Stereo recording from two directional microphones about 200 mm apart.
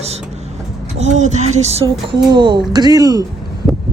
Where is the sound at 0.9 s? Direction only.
35° right (ahead or behind); by 3.2 s 20° right (ahead or behind).